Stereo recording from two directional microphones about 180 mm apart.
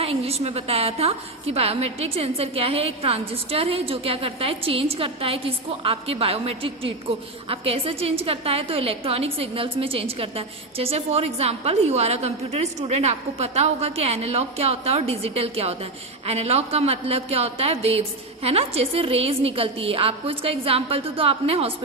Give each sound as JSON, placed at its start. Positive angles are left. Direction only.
{"t": 0.0, "sound": "a woman's voice", "side_deg": -35}